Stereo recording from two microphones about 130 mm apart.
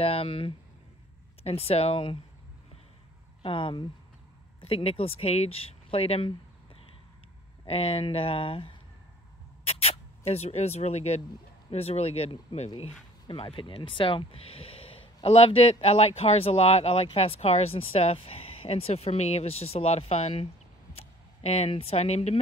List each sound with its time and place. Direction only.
0.0 s speech: 50° left (ahead or behind)
3.4 s speech: 40° left (ahead or behind)